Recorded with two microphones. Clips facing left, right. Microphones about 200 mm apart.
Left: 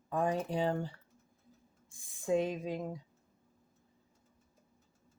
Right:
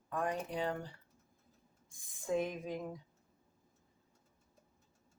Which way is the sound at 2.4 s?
30° left (ahead or behind).